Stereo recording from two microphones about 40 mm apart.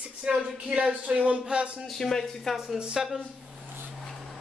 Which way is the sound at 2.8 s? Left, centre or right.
Right.